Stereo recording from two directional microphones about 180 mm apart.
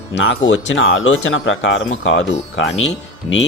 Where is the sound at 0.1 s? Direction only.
90° left.